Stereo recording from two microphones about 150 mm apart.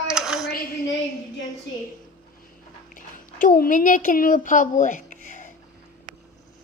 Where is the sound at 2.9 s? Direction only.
70° left (ahead or behind).